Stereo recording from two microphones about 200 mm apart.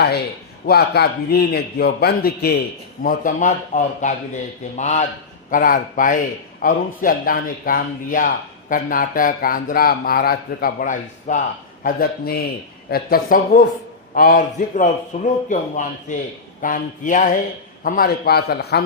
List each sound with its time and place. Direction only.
0.6 s speech: 50° left (ahead or behind)